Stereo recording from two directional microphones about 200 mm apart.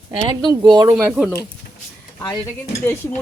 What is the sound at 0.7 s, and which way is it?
Speech, 20° right (ahead or behind).